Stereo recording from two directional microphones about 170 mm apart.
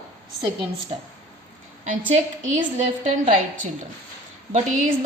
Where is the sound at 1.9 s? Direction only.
50° right (ahead or behind).